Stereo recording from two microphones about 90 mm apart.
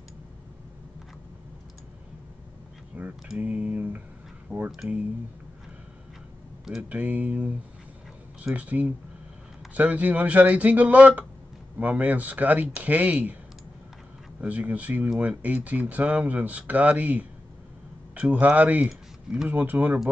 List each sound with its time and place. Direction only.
2.9 s a sound: 20° right (ahead or behind)
4.5 s speech: 15° right (ahead or behind)
6.8 s speech: 15° right (ahead or behind)
8.5 s speech: 15° right (ahead or behind)
14.4 s speech: 15° right (ahead or behind)
18.9 s a sound: 5° right (ahead or behind)
19.5 s speech: 20° right (ahead or behind)